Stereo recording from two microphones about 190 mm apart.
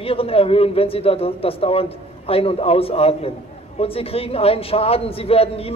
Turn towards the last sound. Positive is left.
turn(degrees=30)  # may be behind; listen again after turning